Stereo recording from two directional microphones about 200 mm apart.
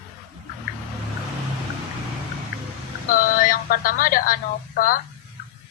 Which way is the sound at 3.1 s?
45° left (ahead or behind).